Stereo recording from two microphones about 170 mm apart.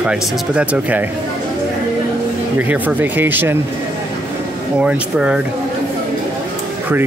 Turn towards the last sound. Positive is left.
turn(degrees=-5)  # may be behind; listen again after turning